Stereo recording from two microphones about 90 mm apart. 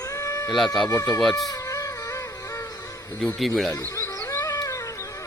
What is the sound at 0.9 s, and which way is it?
Speech, 30° left (ahead or behind).